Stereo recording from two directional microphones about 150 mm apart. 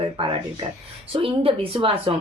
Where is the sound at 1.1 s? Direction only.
35° right (ahead or behind).